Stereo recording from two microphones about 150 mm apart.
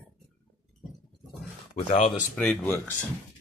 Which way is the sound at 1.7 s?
45° left (ahead or behind).